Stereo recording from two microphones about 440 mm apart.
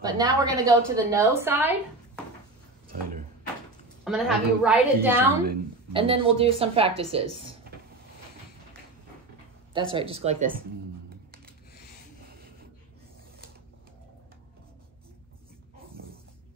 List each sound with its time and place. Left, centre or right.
0.0 s a woman's voice: centre
4.0 s a woman's voice: centre
9.8 s a woman's voice: centre
11.1 s shuffling cards: right